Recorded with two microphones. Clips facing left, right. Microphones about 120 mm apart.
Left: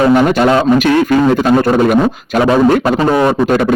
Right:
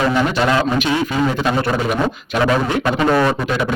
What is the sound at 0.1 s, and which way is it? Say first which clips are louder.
Speech: left 8 dB; 55° left (ahead or behind).